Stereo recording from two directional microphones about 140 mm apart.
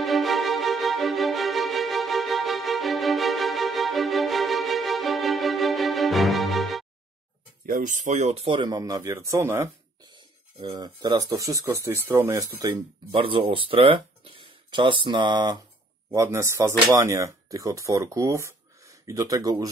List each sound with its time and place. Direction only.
0.0 s music: centre (ahead or behind)
7.6 s speech: 75° right (ahead or behind); by 8.5 s 55° right (ahead or behind)
8.5 s speech: 35° right (ahead or behind)
10.1 s speech: 30° right (ahead or behind)
13.1 s speech: 40° right (ahead or behind)